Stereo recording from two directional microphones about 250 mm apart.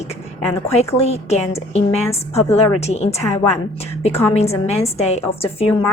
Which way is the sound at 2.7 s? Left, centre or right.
Left.